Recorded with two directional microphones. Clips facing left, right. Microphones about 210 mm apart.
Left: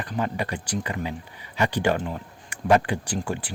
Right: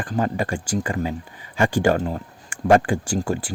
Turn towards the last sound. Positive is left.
turn(degrees=-40)  # may be behind; listen again after turning